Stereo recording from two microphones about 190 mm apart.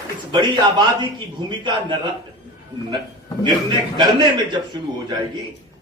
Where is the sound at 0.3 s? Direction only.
25° right (ahead or behind).